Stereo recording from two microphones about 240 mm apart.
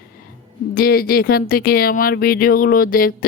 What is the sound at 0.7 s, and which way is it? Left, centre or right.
Speech, left.